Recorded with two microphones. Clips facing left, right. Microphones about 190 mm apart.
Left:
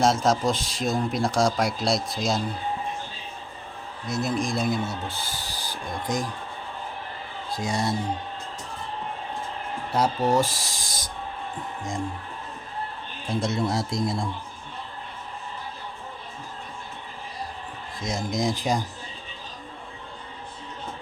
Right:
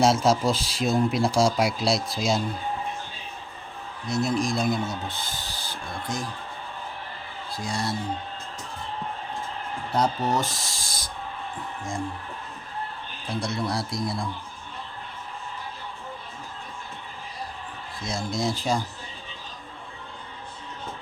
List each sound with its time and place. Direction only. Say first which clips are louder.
0.0 s speech: right 1 dB; 5° right (ahead or behind)
4.1 s speech: right 1 dB; centre (ahead or behind); by 6.2 s 15° left (ahead or behind)
7.5 s speech: left 3 dB; 20° left (ahead or behind)
9.9 s speech: left 2 dB; 5° left (ahead or behind)
13.3 s speech: left 3 dB; 25° left (ahead or behind)
18.0 s speech: left 2 dB; 15° left (ahead or behind)